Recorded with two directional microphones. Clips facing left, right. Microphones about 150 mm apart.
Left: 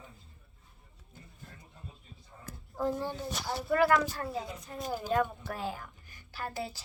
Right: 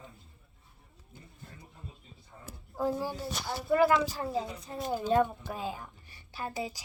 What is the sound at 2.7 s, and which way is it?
Speech, 10° right (ahead or behind).